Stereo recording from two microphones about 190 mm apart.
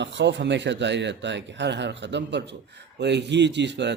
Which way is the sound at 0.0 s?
65° right (ahead or behind).